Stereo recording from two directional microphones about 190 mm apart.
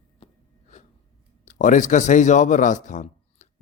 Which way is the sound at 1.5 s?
40° left (ahead or behind).